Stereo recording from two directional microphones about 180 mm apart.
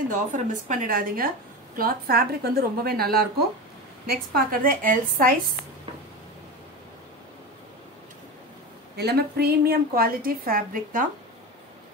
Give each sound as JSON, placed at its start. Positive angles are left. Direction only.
{"t": 0.1, "sound": "a woman's voice", "side_deg": -45}
{"t": 8.9, "sound": "a woman's voice", "side_deg": -65}